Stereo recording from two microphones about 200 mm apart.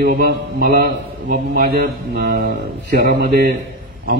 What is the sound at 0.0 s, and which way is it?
A man's voice, 50° right (ahead or behind).